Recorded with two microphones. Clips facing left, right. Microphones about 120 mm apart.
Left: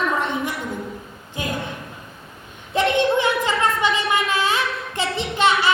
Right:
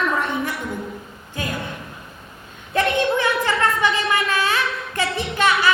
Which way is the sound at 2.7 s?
20° left (ahead or behind).